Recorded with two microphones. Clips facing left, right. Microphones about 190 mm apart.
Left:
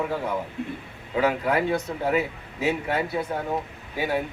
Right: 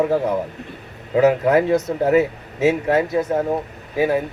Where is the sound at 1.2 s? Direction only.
40° right (ahead or behind).